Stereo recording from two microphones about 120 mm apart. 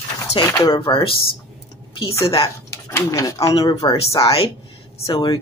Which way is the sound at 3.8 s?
40° left (ahead or behind).